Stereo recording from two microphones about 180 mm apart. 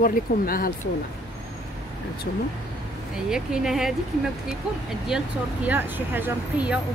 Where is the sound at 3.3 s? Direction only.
5° right (ahead or behind).